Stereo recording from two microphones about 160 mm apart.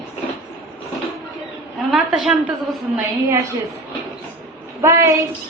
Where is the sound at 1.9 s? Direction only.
5° right (ahead or behind).